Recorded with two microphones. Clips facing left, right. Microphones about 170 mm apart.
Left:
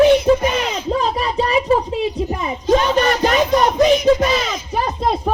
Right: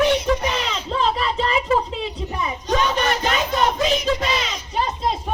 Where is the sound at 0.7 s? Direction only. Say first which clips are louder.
Left 4 dB; 40° left (ahead or behind).